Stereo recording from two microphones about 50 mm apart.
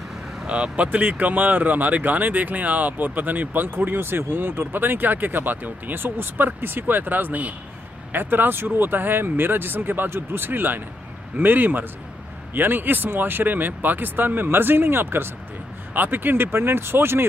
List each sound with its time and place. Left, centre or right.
0.5 s speech: right